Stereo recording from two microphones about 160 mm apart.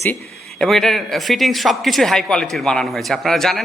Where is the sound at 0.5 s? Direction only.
Centre (ahead or behind).